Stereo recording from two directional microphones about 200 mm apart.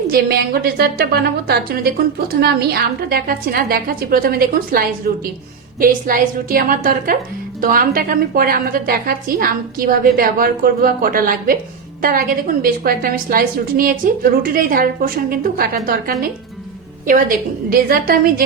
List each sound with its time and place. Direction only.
0.1 s a woman's voice: 50° right (ahead or behind)
12.6 s a woman's voice: 50° right (ahead or behind)